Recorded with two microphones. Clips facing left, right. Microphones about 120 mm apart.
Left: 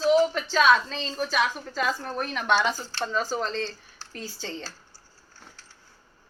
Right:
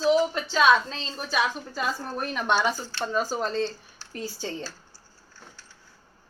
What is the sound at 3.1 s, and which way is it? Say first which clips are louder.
Speech: right 2 dB; 10° right (ahead or behind).